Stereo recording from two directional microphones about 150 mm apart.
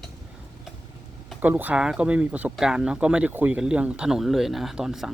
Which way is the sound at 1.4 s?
10° right (ahead or behind).